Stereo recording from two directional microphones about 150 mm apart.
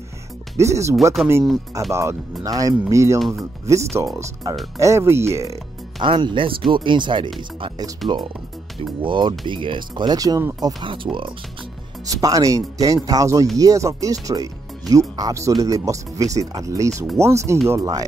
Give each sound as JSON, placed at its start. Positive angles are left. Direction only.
{"t": 0.6, "sound": "speech", "side_deg": -20}
{"t": 3.2, "sound": "speech", "side_deg": 0}
{"t": 3.6, "sound": "speech", "side_deg": -20}
{"t": 5.9, "sound": "speech", "side_deg": -35}
{"t": 9.0, "sound": "speech", "side_deg": -35}
{"t": 12.1, "sound": "speech", "side_deg": -25}